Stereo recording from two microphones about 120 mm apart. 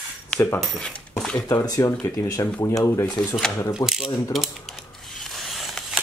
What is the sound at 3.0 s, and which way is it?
Speech, 5° left (ahead or behind).